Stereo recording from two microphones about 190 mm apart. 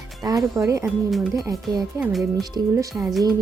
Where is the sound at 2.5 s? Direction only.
15° right (ahead or behind).